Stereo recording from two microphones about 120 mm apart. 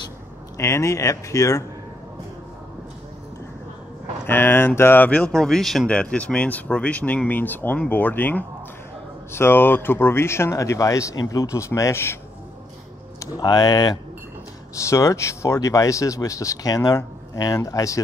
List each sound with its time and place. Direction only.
0.6 s speech: 25° left (ahead or behind)
4.3 s speech: 20° left (ahead or behind)
13.4 s speech: 35° left (ahead or behind)